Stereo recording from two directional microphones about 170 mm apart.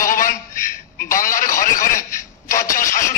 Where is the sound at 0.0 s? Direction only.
50° left (ahead or behind).